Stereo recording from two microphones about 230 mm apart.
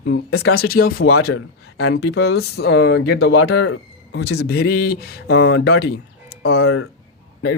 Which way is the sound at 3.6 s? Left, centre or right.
Left.